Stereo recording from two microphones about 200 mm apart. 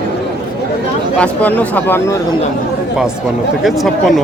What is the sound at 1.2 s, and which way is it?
Speech, 5° left (ahead or behind).